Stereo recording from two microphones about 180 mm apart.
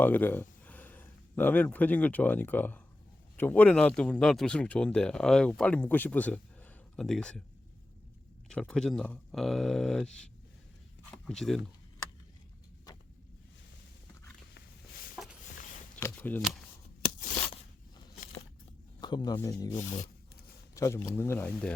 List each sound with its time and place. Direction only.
0.0 s speech: 10° left (ahead or behind)
8.4 s speech: 5° left (ahead or behind)
15.1 s a sound: 5° right (ahead or behind)
16.0 s shuffling cards: 10° left (ahead or behind)
18.9 s speech: 25° left (ahead or behind)